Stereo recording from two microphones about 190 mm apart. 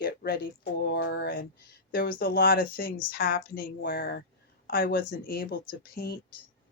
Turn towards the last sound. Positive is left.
turn(degrees=55)  # may be behind; listen again after turning